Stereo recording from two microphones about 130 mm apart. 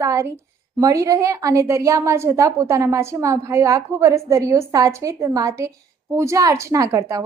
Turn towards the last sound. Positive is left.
turn(degrees=-25)  # may be behind; listen again after turning